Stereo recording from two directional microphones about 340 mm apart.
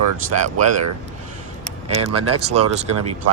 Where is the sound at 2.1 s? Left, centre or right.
Right.